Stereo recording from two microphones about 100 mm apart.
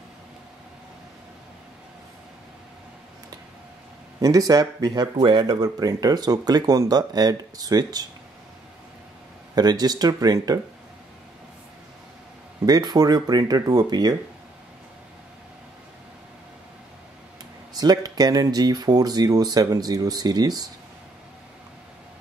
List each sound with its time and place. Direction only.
4.2 s speech: 35° right (ahead or behind)
9.6 s speech: 40° right (ahead or behind)
12.6 s speech: 40° right (ahead or behind)
17.7 s speech: 40° right (ahead or behind)